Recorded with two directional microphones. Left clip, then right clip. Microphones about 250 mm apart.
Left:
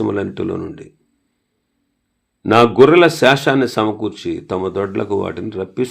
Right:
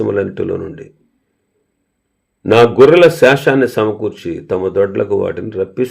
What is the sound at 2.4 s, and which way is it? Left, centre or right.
A man's voice, left.